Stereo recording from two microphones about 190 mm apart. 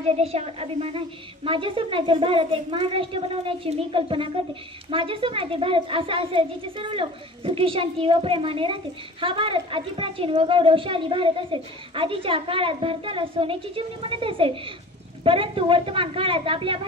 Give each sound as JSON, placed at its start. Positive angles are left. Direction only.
{"t": 0.1, "sound": "a woman's voice", "side_deg": -35}